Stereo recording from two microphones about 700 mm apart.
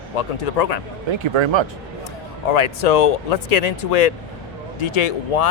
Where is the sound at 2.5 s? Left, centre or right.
Left.